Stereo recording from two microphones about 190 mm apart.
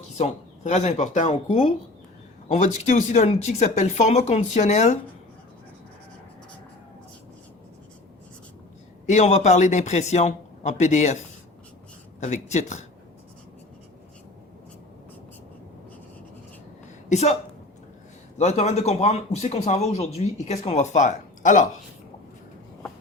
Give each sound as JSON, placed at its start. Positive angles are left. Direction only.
{"t": 0.2, "sound": "a man's voice", "side_deg": 40}
{"t": 9.0, "sound": "a man's voice", "side_deg": 35}
{"t": 12.2, "sound": "a man's voice", "side_deg": 40}
{"t": 17.1, "sound": "speech", "side_deg": 35}
{"t": 18.3, "sound": "a man's voice", "side_deg": 35}